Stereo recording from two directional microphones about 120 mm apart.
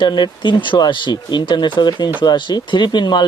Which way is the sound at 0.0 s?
40° left (ahead or behind).